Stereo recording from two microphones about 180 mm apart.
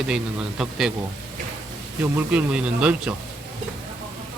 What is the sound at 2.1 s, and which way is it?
Speech, 5° right (ahead or behind).